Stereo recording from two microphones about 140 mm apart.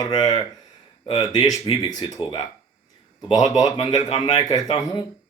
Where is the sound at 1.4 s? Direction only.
30° left (ahead or behind).